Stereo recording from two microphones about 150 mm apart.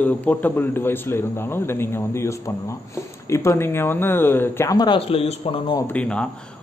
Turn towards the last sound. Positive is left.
turn(degrees=10)  # may be behind; listen again after turning